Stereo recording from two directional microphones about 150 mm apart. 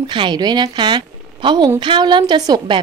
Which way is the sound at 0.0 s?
30° right (ahead or behind).